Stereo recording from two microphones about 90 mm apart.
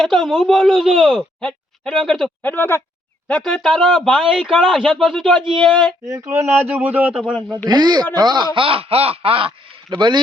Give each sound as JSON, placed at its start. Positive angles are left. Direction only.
{"t": 0.0, "sound": "speech", "side_deg": 0}
{"t": 2.4, "sound": "speech", "side_deg": 20}
{"t": 3.2, "sound": "speech", "side_deg": 15}
{"t": 3.6, "sound": "speech", "side_deg": 5}
{"t": 6.1, "sound": "speech", "side_deg": -35}
{"t": 6.6, "sound": "a man's voice", "side_deg": -25}
{"t": 7.6, "sound": "speech", "side_deg": -50}
{"t": 9.9, "sound": "speech", "side_deg": -55}